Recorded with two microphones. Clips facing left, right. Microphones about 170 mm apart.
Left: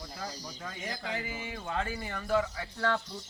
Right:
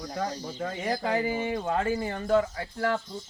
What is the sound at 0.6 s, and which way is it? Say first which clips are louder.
Speech: right 11 dB; 50° right (ahead or behind).